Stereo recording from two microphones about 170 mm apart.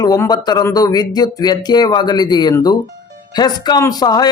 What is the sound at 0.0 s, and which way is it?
A man's voice, 20° left (ahead or behind).